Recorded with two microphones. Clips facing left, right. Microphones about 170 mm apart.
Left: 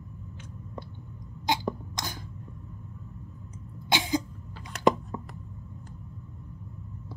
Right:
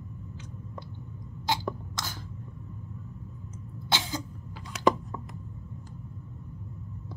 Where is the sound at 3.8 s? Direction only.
15° left (ahead or behind).